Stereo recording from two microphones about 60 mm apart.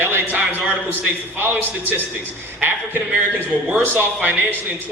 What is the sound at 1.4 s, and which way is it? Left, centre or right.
A man's voice, right.